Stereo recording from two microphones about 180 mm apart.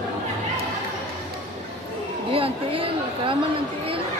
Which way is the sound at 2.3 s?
30° right (ahead or behind).